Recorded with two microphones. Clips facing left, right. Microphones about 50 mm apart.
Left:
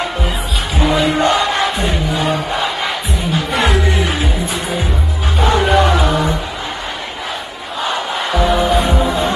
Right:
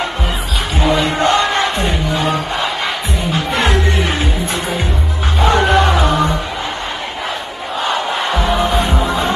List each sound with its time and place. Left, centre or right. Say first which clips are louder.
0.7 s crowd: left 1 dB; centre
3.5 s music: left 1 dB; centre
7.8 s music: right 1 dB; centre